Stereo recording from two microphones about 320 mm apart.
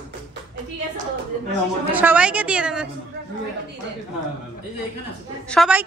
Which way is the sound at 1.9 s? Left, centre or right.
Centre.